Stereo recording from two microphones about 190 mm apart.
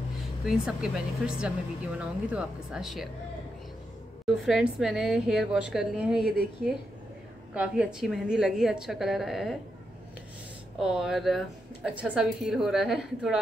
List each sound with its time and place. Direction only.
0.5 s a woman's voice: 5° right (ahead or behind)
4.3 s a woman's voice: centre (ahead or behind)
7.5 s a woman's voice: 5° right (ahead or behind)
10.8 s a woman's voice: 5° right (ahead or behind)